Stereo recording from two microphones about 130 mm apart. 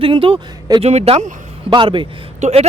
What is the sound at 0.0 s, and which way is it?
Speech, 45° right (ahead or behind).